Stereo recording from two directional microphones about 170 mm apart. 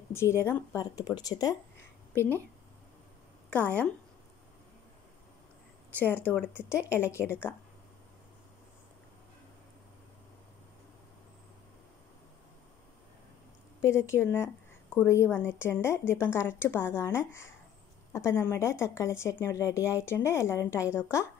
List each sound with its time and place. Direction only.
0.1 s speech: 15° left (ahead or behind)
3.4 s a woman's voice: 10° left (ahead or behind)
6.3 s a woman's voice: 10° left (ahead or behind)
13.7 s a woman's voice: 15° left (ahead or behind)